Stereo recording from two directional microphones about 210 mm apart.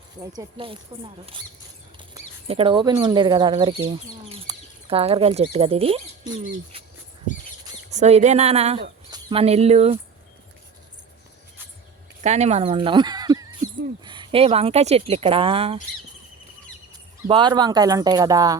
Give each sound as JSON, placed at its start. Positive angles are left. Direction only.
{"t": 0.2, "sound": "speech", "side_deg": -20}
{"t": 2.5, "sound": "speech", "side_deg": -25}
{"t": 7.9, "sound": "speech", "side_deg": -30}
{"t": 12.2, "sound": "speech", "side_deg": -30}
{"t": 17.2, "sound": "speech", "side_deg": -20}